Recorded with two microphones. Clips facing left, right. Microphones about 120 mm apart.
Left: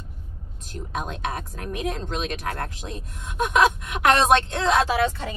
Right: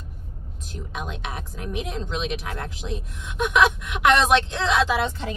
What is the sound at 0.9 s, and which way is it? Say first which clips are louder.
Speech: left 4 dB; 45° left (ahead or behind).